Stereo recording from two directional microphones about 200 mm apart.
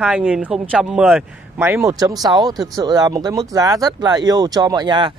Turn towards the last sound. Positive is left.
turn(degrees=-20)  # may be behind; listen again after turning